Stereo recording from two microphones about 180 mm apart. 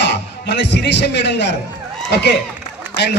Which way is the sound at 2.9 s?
70° left (ahead or behind).